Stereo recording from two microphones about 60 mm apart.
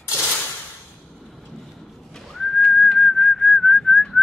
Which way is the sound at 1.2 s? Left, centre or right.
Centre.